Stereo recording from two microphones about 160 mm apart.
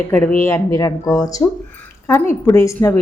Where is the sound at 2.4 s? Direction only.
20° left (ahead or behind).